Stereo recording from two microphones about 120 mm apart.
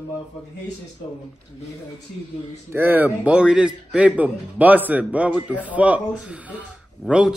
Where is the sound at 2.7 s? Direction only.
15° right (ahead or behind).